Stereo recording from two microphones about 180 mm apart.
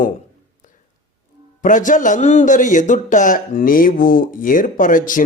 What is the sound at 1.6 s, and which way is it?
A man's voice, 45° left (ahead or behind).